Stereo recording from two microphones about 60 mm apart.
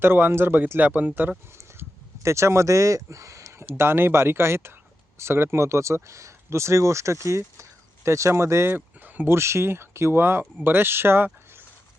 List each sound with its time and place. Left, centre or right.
0.0 s speech: right
0.8 s speech: right
2.2 s speech: right
8.7 s a sound: right
9.3 s speech: right